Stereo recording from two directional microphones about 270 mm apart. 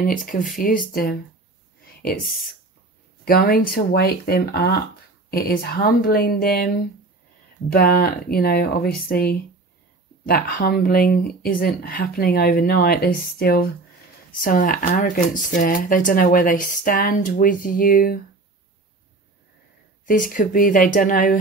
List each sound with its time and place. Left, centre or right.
0.0 s speech: left
3.3 s speech: left
7.7 s speech: left
20.1 s speech: left